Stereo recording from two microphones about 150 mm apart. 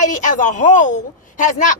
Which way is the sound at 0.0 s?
55° left (ahead or behind).